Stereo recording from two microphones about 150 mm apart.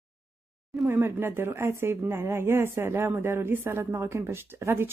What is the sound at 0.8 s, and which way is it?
Speech, 15° right (ahead or behind).